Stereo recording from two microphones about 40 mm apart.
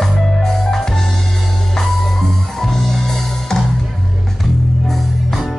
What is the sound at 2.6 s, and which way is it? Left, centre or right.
Music, centre.